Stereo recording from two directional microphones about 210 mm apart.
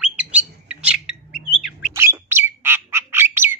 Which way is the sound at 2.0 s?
10° right (ahead or behind).